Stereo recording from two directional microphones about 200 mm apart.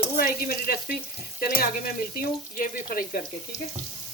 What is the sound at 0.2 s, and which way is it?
Frying, 45° left (ahead or behind).